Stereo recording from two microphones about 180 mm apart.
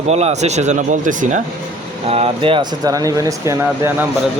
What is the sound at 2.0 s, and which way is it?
Speech, 30° right (ahead or behind).